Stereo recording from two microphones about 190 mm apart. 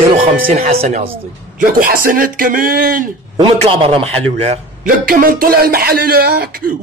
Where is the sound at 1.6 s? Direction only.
50° right (ahead or behind).